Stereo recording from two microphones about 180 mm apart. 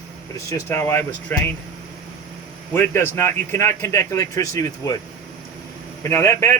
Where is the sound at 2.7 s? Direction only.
10° left (ahead or behind).